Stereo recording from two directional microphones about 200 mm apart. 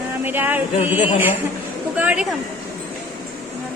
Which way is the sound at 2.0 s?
5° right (ahead or behind).